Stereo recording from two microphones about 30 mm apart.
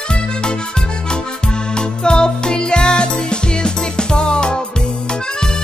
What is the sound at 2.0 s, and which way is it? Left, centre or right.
Music, left.